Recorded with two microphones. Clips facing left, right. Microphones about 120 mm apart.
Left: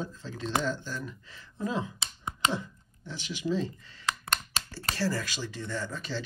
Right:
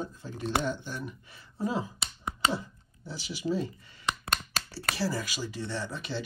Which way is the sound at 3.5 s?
10° right (ahead or behind).